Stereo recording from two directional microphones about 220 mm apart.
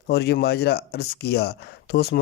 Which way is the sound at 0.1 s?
45° left (ahead or behind).